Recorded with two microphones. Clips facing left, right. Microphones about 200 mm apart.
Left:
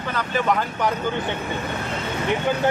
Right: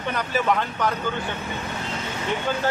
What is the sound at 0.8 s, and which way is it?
Speech, 15° left (ahead or behind).